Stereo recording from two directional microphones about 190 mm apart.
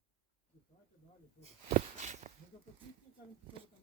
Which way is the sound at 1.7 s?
40° right (ahead or behind).